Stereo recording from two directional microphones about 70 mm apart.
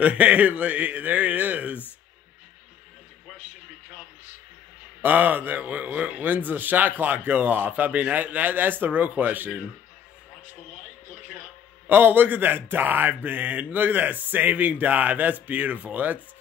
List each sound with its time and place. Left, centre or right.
0.0 s a man's voice: centre
5.0 s a man's voice: right
11.9 s a man's voice: right